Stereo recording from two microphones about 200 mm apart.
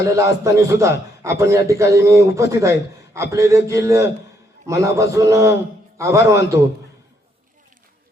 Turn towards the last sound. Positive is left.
turn(degrees=-15)  # may be behind; listen again after turning